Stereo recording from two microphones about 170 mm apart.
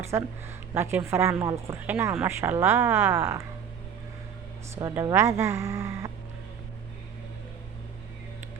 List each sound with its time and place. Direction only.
0.0 s speech: 15° right (ahead or behind)
4.7 s speech: 20° right (ahead or behind)